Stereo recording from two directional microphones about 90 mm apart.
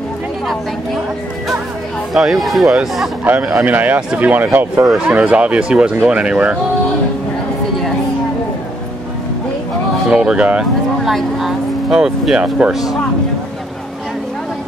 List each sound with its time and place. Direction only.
2.1 s speech: centre (ahead or behind)
3.3 s speech: 20° right (ahead or behind)
10.0 s speech: 10° right (ahead or behind)